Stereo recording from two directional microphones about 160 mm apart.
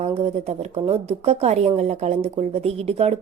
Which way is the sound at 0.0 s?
40° right (ahead or behind).